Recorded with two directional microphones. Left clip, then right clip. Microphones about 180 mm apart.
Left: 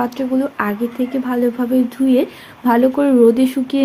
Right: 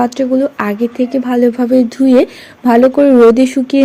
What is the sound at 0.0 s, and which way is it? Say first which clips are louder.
Speech: right 6 dB; 35° right (ahead or behind).